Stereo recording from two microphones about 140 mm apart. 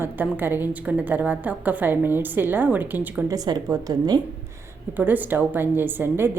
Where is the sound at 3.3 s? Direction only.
25° right (ahead or behind).